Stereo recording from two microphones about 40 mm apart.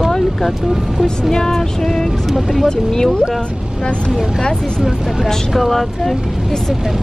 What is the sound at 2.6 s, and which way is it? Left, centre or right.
Speech, centre.